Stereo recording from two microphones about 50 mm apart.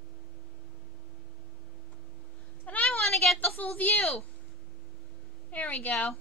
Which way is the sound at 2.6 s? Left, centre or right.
Left.